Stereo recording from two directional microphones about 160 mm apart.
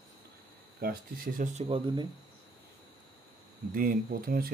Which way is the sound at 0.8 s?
65° right (ahead or behind).